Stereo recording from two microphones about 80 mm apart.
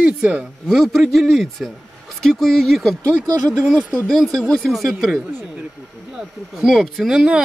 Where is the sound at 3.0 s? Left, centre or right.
Right.